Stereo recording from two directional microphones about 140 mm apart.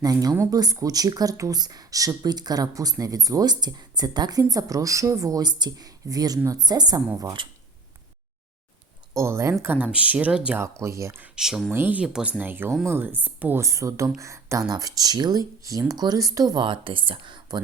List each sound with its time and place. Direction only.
0.0 s speech: 25° right (ahead or behind)
9.1 s speech: 20° right (ahead or behind)
10.6 s speech: 20° right (ahead or behind)
11.3 s speech: 5° right (ahead or behind)
11.7 s speech: 15° right (ahead or behind); by 17.6 s 35° right (ahead or behind)